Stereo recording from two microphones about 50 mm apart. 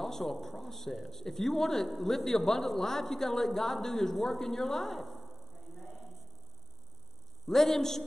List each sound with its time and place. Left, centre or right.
0.0 s speech: centre
7.4 s a man's voice: centre